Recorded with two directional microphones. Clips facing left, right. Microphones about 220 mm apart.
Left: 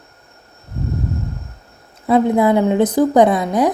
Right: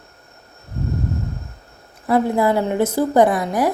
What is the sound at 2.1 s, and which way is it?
A woman's voice, 20° left (ahead or behind).